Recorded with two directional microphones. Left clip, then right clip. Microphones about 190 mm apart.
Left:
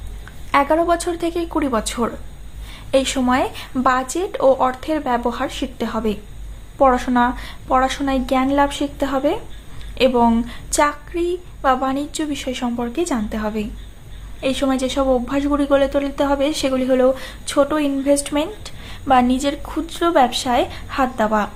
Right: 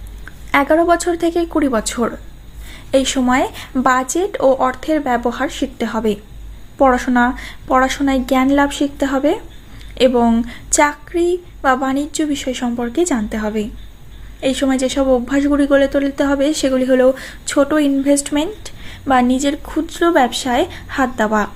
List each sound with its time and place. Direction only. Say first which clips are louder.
0.5 s a woman's voice: right 3 dB; 20° right (ahead or behind)